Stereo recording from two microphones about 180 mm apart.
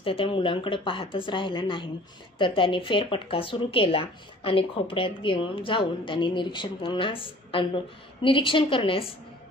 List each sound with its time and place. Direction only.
0.0 s speech: 30° left (ahead or behind)